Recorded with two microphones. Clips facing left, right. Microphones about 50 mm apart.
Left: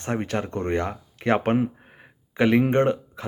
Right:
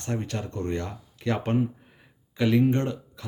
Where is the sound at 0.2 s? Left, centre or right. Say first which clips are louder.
Left 5 dB; left.